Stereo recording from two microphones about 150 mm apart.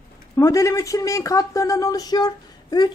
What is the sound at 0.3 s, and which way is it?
Speech, 20° left (ahead or behind).